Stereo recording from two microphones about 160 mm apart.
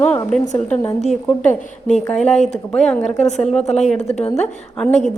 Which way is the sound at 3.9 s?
45° left (ahead or behind).